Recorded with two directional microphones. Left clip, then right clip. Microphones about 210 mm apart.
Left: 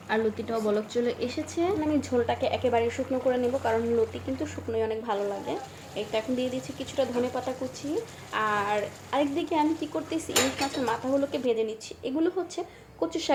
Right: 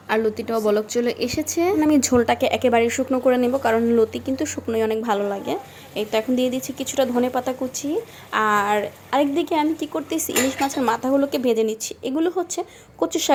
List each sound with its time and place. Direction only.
0.1 s speech: 50° right (ahead or behind)